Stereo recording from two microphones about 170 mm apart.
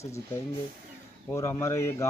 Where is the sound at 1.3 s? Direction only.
15° left (ahead or behind).